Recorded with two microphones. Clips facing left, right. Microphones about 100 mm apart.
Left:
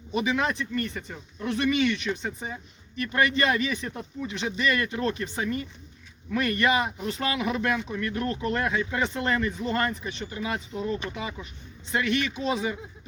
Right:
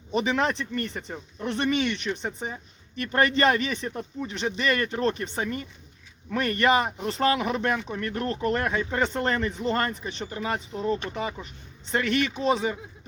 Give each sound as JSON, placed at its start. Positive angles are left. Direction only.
{"t": 0.3, "sound": "speech", "side_deg": -35}